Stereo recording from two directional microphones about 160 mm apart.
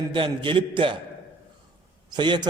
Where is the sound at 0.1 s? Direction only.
30° right (ahead or behind).